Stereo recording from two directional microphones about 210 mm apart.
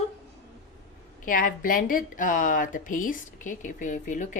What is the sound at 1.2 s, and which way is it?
Speech, 40° left (ahead or behind).